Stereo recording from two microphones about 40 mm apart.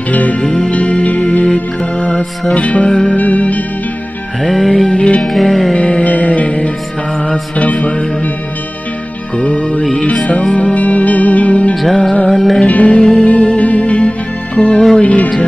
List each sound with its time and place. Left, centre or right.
0.1 s music: left
4.4 s music: centre
4.9 s music: left
5.3 s music: centre
5.8 s music: left
6.0 s music: left
9.4 s music: left
11.7 s music: centre
12.6 s music: left